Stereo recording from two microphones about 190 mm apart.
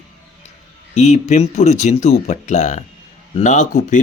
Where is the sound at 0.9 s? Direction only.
35° left (ahead or behind).